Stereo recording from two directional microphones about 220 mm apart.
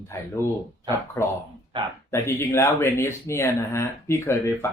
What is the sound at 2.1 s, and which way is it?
Speech, 10° left (ahead or behind).